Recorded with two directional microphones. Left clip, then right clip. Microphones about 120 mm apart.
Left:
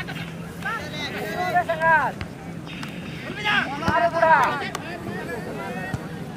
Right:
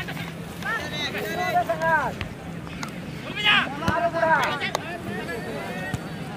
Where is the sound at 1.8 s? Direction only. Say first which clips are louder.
Left 6 dB; 40° left (ahead or behind).